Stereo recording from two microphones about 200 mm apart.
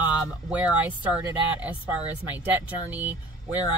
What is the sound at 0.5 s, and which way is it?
Speech, 5° right (ahead or behind).